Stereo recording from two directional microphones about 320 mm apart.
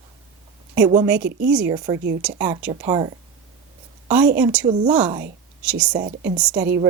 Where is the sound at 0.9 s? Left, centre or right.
Centre.